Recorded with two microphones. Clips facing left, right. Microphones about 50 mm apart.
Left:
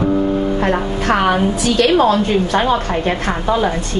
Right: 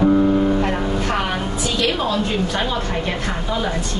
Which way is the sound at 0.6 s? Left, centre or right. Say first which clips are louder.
Left 3 dB; left.